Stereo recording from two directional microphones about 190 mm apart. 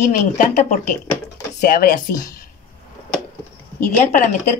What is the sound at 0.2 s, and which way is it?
Speech, 40° left (ahead or behind).